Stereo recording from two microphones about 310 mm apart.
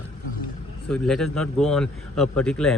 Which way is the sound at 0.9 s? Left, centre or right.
Centre.